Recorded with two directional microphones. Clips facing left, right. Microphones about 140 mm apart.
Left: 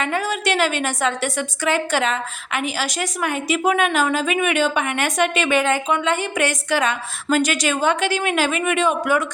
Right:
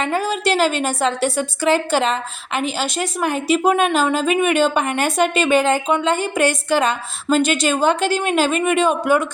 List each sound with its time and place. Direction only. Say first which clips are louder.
0.0 s a woman's voice: right 2 dB; 30° right (ahead or behind)